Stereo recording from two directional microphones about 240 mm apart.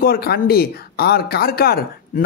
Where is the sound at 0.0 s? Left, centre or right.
Left.